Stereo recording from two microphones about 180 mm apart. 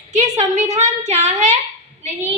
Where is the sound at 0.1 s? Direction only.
40° right (ahead or behind).